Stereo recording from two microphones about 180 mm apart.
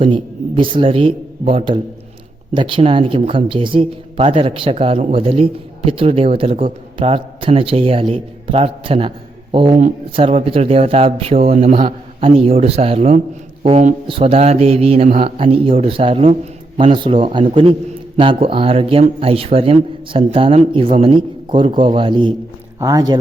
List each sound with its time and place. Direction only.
0.0 s a man's voice: 30° right (ahead or behind)